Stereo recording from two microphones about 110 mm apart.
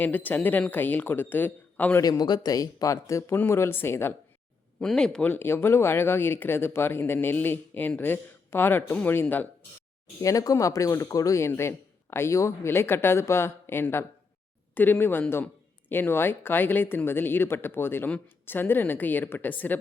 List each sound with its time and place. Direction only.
0.0 s speech: 15° left (ahead or behind)
2.0 s a woman's voice: 35° left (ahead or behind); by 4.1 s 20° left (ahead or behind)
4.8 s speech: 5° left (ahead or behind)
5.3 s a woman's voice: 20° left (ahead or behind)
10.2 s a woman's voice: 30° left (ahead or behind)